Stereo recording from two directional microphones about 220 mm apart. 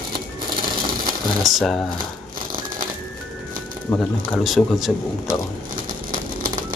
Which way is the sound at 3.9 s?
5° left (ahead or behind).